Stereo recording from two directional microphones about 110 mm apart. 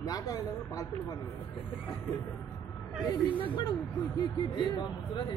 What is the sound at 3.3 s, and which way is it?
Speech, 45° left (ahead or behind).